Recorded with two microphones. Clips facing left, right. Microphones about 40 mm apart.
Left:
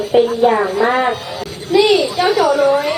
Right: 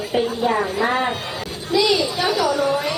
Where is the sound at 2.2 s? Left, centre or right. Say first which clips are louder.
Left 6 dB; left.